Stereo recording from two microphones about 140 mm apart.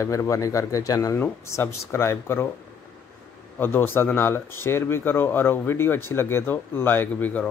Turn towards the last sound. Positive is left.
turn(degrees=10)  # may be behind; listen again after turning